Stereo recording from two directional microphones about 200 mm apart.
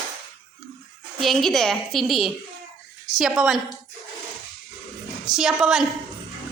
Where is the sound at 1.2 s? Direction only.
Centre (ahead or behind).